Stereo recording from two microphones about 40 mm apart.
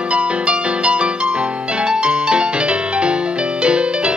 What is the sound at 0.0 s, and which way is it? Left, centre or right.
Music, right.